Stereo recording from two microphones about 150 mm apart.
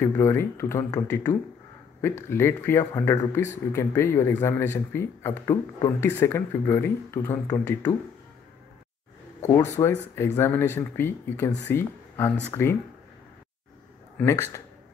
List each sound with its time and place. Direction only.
0.0 s speech: 15° left (ahead or behind)
9.4 s speech: 20° left (ahead or behind)
14.2 s speech: 20° left (ahead or behind)